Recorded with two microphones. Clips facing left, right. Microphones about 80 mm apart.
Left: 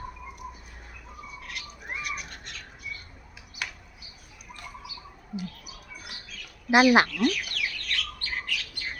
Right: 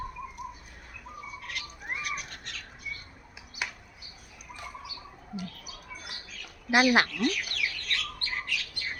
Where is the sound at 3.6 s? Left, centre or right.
Centre.